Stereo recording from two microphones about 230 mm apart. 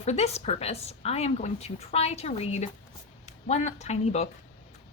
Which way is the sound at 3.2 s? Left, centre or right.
Left.